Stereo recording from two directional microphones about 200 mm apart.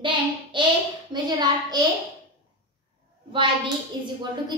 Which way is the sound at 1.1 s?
20° right (ahead or behind).